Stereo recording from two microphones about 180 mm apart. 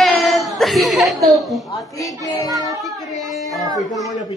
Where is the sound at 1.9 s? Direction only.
20° left (ahead or behind).